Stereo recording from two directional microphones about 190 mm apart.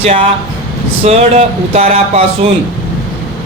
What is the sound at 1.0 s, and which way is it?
Speech, 35° right (ahead or behind).